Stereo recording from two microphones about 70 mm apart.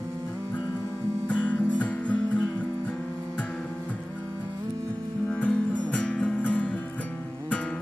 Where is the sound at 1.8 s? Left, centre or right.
Centre.